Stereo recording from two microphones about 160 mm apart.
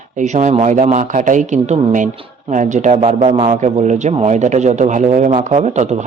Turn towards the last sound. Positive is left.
turn(degrees=-40)  # may be behind; listen again after turning